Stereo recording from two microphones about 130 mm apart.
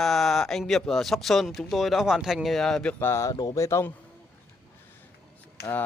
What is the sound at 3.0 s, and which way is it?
Speech, 20° left (ahead or behind).